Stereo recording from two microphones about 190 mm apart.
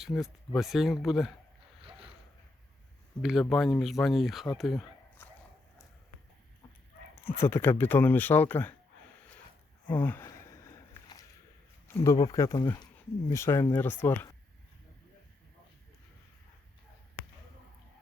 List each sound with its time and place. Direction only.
0.0 s speech: centre (ahead or behind)
3.2 s speech: centre (ahead or behind)
5.2 s a sound: 15° left (ahead or behind)
7.3 s speech: 10° left (ahead or behind)
9.9 s speech: 10° left (ahead or behind)
12.0 s speech: 15° left (ahead or behind)